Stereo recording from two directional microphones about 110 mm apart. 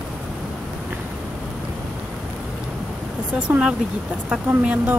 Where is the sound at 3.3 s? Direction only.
10° right (ahead or behind).